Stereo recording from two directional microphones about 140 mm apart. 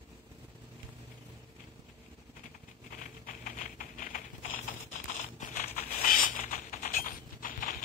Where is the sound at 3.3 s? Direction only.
75° left (ahead or behind).